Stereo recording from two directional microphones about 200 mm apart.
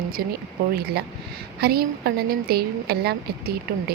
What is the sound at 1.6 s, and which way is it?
A woman's voice, 50° right (ahead or behind).